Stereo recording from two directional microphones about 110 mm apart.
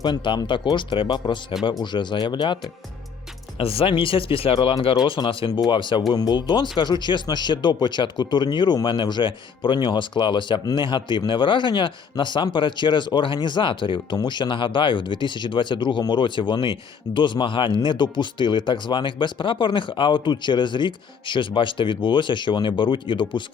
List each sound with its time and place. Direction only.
0.0 s speech: 45° left (ahead or behind)
3.6 s speech: 55° left (ahead or behind)
5.5 s speech: 40° left (ahead or behind)